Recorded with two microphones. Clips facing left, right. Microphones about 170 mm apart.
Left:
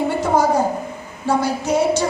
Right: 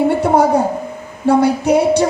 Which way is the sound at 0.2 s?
60° right (ahead or behind).